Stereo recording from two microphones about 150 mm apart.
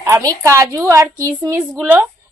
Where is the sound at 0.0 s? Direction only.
20° right (ahead or behind).